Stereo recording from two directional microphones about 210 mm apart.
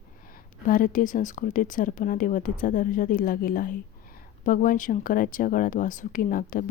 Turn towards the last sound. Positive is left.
turn(degrees=40)  # may be behind; listen again after turning